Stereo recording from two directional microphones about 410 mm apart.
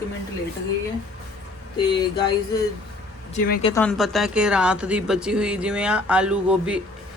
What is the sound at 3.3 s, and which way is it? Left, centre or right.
Speech, centre.